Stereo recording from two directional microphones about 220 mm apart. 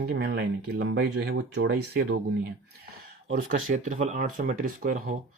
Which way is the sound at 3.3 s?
35° right (ahead or behind).